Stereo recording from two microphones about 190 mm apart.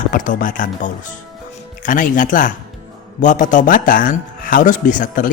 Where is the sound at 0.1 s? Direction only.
45° left (ahead or behind).